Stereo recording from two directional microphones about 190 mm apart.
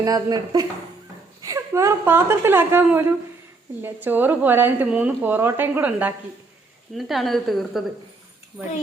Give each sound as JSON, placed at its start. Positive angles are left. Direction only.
{"t": 0.0, "sound": "a woman's voice", "side_deg": -20}